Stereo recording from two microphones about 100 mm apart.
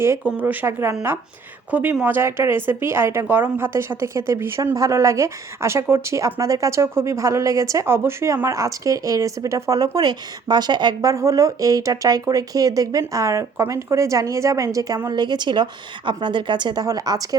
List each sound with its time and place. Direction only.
0.3 s a woman's voice: 15° right (ahead or behind); by 11.1 s 45° right (ahead or behind)
11.1 s speech: 35° right (ahead or behind)
15.1 s a woman's voice: 45° right (ahead or behind)
16.8 s speech: 40° right (ahead or behind)